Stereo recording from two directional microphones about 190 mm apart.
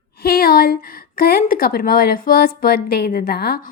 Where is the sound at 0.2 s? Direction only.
55° left (ahead or behind).